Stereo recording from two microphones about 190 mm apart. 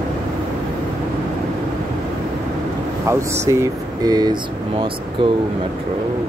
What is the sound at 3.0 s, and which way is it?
Speech, 15° right (ahead or behind).